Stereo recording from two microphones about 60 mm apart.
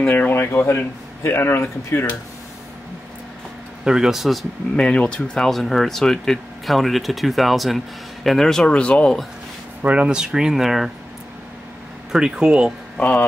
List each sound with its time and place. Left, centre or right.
0.1 s speech: left
3.8 s speech: centre
4.7 s speech: centre
9.8 s speech: right
10.0 s speech: centre
12.1 s speech: centre
12.9 s speech: left